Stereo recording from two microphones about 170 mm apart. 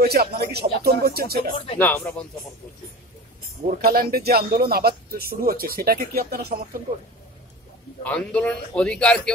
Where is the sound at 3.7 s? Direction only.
60° right (ahead or behind).